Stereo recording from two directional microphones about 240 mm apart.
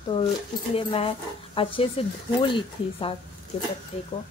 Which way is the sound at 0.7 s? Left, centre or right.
Left.